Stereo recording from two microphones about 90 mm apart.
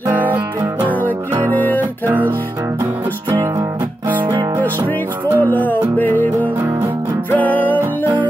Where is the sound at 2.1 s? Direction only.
25° right (ahead or behind).